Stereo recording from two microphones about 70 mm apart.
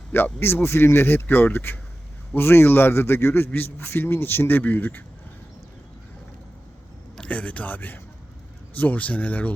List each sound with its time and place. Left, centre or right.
0.3 s a man's voice: left
7.2 s speech: centre